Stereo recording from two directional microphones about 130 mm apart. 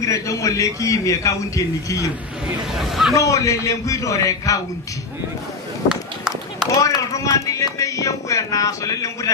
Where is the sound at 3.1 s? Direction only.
25° left (ahead or behind).